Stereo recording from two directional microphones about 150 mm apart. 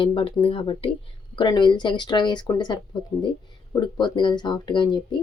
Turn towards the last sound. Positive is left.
turn(degrees=30)  # may be behind; listen again after turning